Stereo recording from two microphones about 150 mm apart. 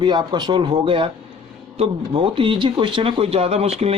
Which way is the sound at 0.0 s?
30° right (ahead or behind).